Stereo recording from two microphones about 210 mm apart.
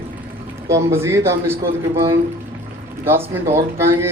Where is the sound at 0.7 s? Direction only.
15° right (ahead or behind).